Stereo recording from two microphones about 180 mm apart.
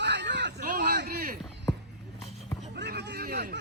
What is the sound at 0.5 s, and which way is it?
Speech, 50° right (ahead or behind).